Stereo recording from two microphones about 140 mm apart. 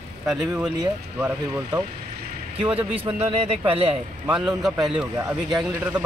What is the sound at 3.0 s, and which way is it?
Speech, 50° right (ahead or behind).